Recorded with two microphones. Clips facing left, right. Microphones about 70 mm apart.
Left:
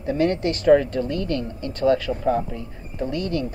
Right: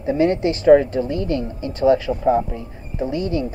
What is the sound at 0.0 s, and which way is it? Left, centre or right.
Speech, centre.